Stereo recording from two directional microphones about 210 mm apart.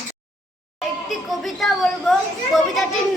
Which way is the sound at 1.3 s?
Centre (ahead or behind).